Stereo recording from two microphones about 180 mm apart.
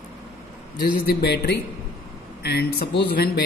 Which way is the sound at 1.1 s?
60° left (ahead or behind).